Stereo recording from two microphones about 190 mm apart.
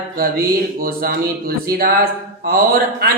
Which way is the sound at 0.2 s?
50° right (ahead or behind).